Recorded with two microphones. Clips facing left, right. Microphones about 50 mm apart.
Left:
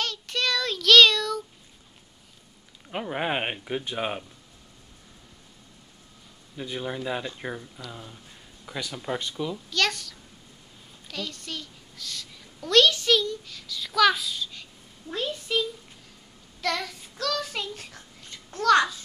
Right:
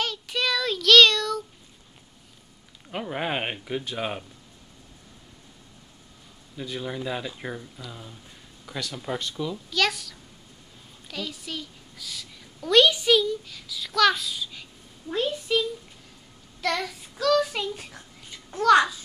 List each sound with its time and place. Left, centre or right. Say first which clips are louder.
0.0 s child singing: right 1 dB; centre
2.9 s speech: left 1 dB; centre
6.5 s a child's voice: even; centre
9.7 s a child's voice: right 2 dB; centre